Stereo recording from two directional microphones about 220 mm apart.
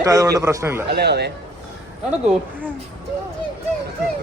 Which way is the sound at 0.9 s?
50° right (ahead or behind).